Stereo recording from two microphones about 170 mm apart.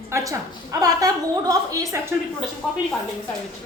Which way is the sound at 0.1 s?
20° right (ahead or behind).